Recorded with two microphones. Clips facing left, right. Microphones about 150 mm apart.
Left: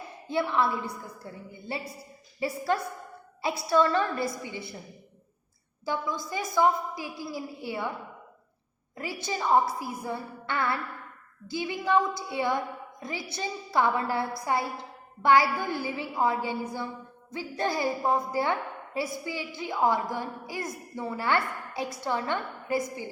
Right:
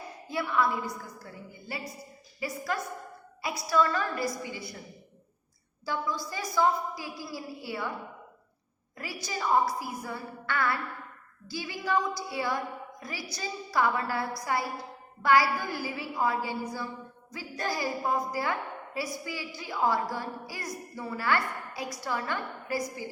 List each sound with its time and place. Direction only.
0.3 s a woman's voice: 25° left (ahead or behind)
5.8 s a woman's voice: 20° left (ahead or behind)
9.0 s a woman's voice: 25° left (ahead or behind)
17.6 s a woman's voice: 25° left (ahead or behind)